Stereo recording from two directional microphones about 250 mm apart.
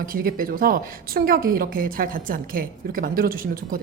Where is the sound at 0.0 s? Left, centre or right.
Right.